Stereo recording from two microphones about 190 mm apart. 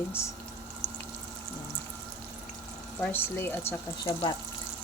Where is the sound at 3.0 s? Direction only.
10° left (ahead or behind).